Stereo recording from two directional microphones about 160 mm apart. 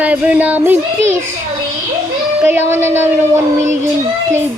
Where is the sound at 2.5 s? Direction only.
15° right (ahead or behind).